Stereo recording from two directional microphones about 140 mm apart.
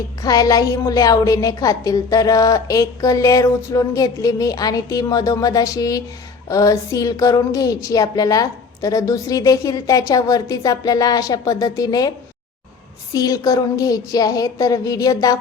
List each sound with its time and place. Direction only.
0.2 s a woman's voice: 25° left (ahead or behind)
13.1 s a woman's voice: 25° left (ahead or behind)